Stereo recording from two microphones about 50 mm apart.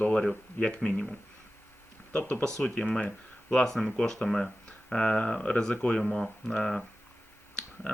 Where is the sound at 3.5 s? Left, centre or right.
Centre.